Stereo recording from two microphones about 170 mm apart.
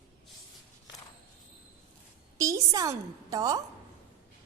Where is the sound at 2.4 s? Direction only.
20° right (ahead or behind).